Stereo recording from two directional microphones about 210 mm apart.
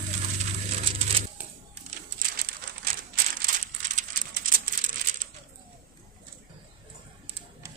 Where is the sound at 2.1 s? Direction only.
45° right (ahead or behind).